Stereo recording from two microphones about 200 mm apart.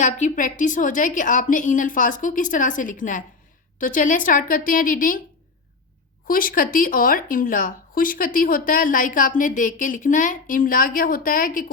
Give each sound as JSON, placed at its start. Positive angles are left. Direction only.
{"t": 0.0, "sound": "a woman's voice", "side_deg": 40}
{"t": 6.2, "sound": "speech", "side_deg": 45}